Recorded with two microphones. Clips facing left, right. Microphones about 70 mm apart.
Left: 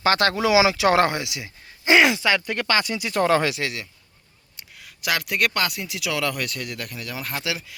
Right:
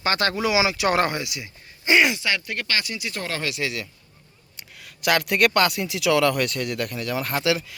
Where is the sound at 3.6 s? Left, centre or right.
Left.